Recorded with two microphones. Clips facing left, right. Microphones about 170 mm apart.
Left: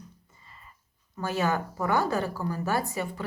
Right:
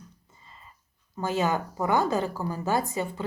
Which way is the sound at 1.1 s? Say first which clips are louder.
Right 1 dB; 20° right (ahead or behind).